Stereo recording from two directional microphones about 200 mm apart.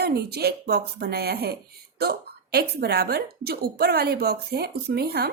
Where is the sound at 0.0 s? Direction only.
50° right (ahead or behind).